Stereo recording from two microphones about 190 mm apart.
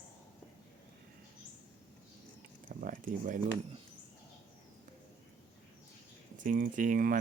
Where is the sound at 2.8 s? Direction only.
45° right (ahead or behind).